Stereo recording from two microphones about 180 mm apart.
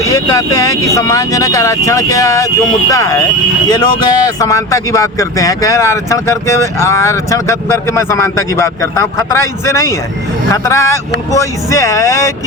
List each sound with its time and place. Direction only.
0.0 s speech: 20° left (ahead or behind)